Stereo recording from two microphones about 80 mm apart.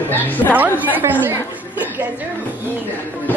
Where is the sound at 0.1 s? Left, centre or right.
Left.